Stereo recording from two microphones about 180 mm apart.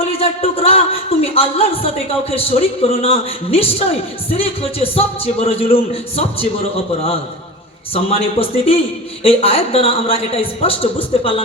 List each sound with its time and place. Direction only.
0.2 s a man's voice: 35° left (ahead or behind)
7.9 s a man's voice: 30° left (ahead or behind)